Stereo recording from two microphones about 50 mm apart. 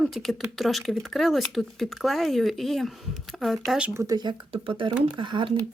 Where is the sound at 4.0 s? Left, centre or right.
Right.